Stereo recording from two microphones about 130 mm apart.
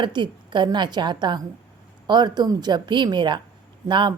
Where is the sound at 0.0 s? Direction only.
35° right (ahead or behind).